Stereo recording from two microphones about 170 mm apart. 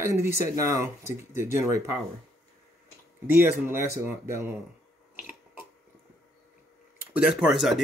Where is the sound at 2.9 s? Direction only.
10° right (ahead or behind).